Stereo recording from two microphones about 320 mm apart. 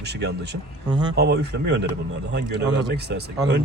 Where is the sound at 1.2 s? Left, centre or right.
Right.